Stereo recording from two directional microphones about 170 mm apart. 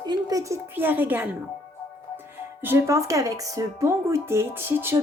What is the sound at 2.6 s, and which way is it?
Speech, 15° right (ahead or behind).